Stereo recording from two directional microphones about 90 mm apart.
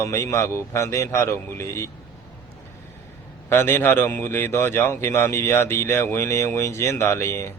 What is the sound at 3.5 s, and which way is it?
A man's voice, 25° left (ahead or behind).